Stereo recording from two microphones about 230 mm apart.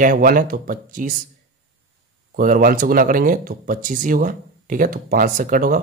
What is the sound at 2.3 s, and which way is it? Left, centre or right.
Speech, right.